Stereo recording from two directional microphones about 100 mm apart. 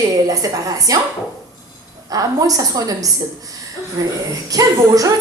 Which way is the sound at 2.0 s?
35° right (ahead or behind).